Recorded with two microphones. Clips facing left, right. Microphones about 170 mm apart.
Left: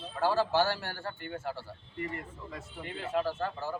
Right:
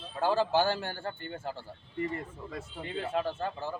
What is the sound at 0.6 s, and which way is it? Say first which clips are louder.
Speech: right 1 dB; 20° right (ahead or behind).